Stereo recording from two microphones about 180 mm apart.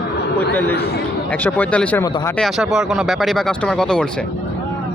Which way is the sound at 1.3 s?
10° left (ahead or behind).